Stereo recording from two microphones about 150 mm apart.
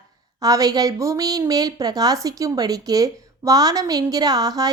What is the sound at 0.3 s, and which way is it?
A woman's voice, 25° right (ahead or behind).